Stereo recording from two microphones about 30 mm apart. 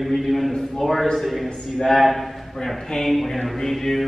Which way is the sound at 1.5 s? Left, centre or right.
Centre.